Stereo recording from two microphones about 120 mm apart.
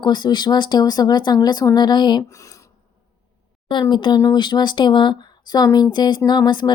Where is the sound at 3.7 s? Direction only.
40° left (ahead or behind).